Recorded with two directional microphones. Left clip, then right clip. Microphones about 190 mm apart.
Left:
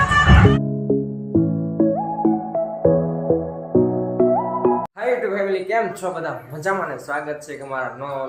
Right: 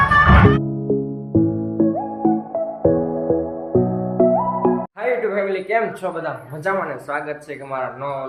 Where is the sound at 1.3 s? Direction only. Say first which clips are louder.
Right 1 dB; centre (ahead or behind).